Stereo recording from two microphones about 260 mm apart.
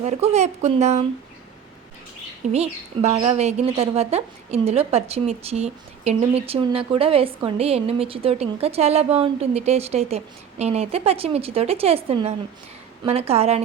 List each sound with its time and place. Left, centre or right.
0.0 s a woman's voice: right
2.5 s a woman's voice: right